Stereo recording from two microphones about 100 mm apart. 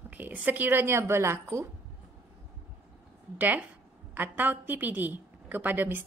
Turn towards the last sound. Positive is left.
turn(degrees=-20)  # may be behind; listen again after turning